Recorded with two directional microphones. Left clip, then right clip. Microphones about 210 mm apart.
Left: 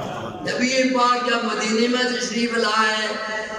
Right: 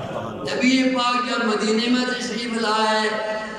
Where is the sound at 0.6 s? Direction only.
20° right (ahead or behind).